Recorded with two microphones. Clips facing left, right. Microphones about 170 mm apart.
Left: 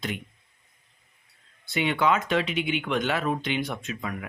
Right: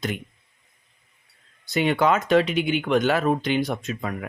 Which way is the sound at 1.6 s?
40° right (ahead or behind).